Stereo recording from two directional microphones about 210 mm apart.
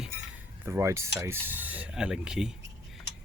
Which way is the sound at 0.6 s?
15° right (ahead or behind).